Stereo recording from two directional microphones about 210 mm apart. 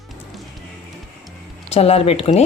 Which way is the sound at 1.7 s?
30° left (ahead or behind).